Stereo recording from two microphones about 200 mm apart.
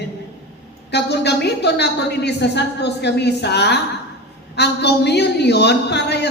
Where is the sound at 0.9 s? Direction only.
55° left (ahead or behind).